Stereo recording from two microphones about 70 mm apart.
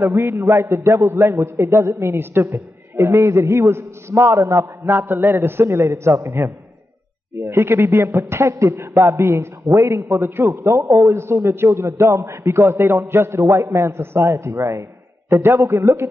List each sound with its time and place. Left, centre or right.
0.0 s speech: right
4.8 s speech: right